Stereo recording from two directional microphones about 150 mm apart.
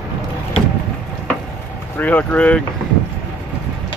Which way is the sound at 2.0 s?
10° left (ahead or behind).